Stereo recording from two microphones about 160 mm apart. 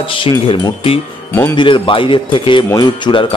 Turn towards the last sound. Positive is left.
turn(degrees=30)  # may be behind; listen again after turning